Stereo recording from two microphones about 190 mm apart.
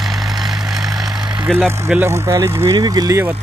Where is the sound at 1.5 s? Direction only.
Centre (ahead or behind).